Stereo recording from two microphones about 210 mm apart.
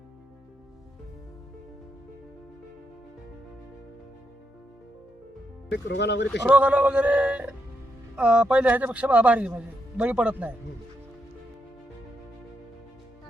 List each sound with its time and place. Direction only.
5.7 s speech: 55° left (ahead or behind)
6.4 s a man's voice: 5° right (ahead or behind)